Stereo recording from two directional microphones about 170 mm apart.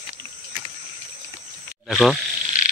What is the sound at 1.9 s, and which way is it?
Speech, 5° left (ahead or behind).